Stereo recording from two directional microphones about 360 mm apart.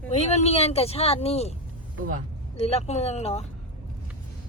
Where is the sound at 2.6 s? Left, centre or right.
Centre.